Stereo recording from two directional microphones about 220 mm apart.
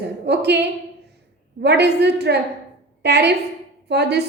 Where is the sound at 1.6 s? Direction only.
50° right (ahead or behind).